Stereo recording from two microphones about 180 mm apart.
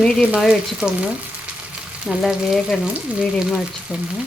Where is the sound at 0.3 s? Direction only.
5° right (ahead or behind).